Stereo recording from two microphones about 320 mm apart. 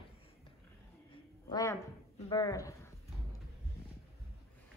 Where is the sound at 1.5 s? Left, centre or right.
Centre.